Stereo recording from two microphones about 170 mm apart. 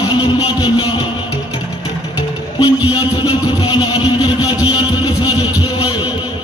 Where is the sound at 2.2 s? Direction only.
25° left (ahead or behind).